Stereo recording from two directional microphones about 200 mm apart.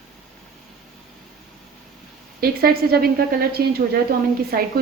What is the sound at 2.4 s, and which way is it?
A woman's voice, 50° right (ahead or behind).